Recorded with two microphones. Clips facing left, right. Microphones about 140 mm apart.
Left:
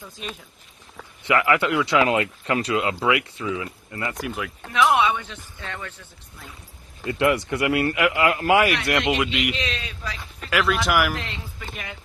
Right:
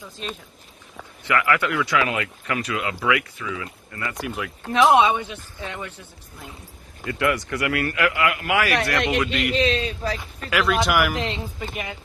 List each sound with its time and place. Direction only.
0.2 s speech: 5° left (ahead or behind)
1.2 s speech: 20° left (ahead or behind)
4.3 s speech: centre (ahead or behind)
4.7 s speech: 30° right (ahead or behind)
7.0 s speech: 25° left (ahead or behind)
9.6 s speech: 35° right (ahead or behind)
10.5 s speech: centre (ahead or behind)
11.1 s a man's voice: 20° right (ahead or behind)